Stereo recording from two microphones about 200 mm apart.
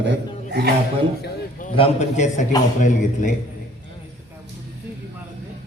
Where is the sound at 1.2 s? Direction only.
40° left (ahead or behind).